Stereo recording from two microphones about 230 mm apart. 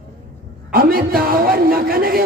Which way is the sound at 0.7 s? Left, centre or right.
Right.